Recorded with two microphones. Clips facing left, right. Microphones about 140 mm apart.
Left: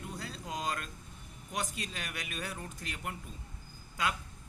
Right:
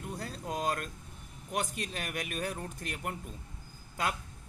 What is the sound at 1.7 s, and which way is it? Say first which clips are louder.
Speech: right 4 dB; 45° right (ahead or behind).